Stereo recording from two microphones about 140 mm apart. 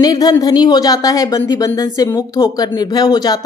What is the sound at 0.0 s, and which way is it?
A woman's voice, 25° left (ahead or behind).